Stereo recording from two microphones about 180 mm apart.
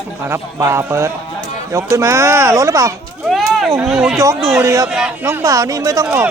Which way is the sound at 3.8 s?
Centre (ahead or behind).